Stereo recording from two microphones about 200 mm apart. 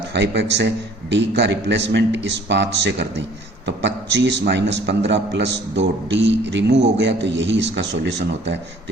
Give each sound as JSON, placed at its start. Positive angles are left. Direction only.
{"t": 0.1, "sound": "a man's voice", "side_deg": -60}
{"t": 6.7, "sound": "a man's voice", "side_deg": -30}
{"t": 7.0, "sound": "a man's voice", "side_deg": -60}